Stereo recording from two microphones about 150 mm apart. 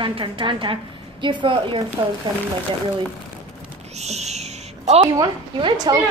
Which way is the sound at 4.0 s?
45° right (ahead or behind).